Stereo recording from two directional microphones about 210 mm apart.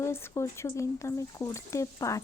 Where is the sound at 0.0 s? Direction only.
15° left (ahead or behind).